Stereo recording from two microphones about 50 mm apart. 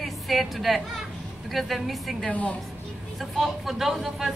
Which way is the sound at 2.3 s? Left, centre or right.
Left.